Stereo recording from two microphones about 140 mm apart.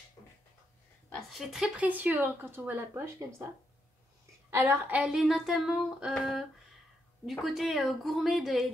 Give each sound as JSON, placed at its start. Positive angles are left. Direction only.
{"t": 0.2, "sound": "a sound", "side_deg": 30}
{"t": 1.1, "sound": "speech", "side_deg": 0}
{"t": 4.5, "sound": "speech", "side_deg": -15}